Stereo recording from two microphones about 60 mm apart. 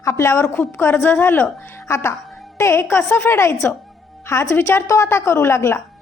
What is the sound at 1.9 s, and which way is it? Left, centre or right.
A woman's voice, left.